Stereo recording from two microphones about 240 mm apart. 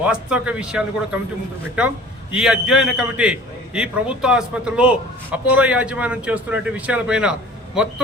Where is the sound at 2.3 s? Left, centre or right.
Centre.